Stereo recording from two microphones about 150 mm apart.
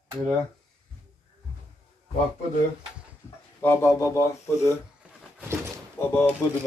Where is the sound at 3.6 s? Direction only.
15° left (ahead or behind).